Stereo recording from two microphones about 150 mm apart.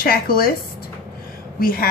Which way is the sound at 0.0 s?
80° left.